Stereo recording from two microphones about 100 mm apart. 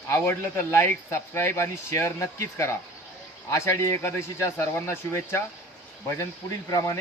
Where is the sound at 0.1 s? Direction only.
25° left (ahead or behind).